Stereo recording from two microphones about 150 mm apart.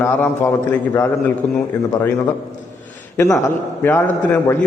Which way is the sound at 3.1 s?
15° left (ahead or behind).